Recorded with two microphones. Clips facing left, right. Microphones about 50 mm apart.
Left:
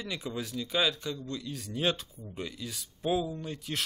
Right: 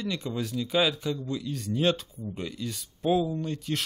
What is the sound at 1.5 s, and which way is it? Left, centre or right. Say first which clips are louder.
Speech: right 5 dB; centre.